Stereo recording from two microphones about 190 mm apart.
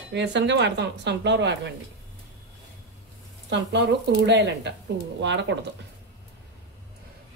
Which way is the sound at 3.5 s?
65° right (ahead or behind).